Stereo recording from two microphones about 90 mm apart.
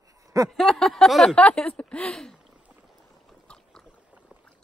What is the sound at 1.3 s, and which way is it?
Speech, 10° left (ahead or behind).